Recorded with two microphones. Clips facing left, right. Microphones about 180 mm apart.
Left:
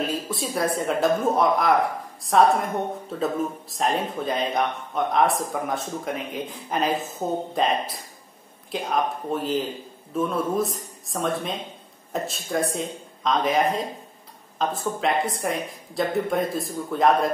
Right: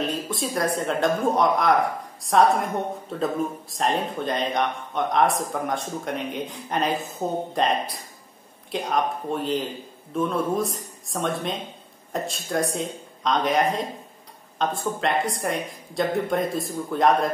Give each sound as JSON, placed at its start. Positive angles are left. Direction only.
{"t": 0.0, "sound": "speech", "side_deg": 5}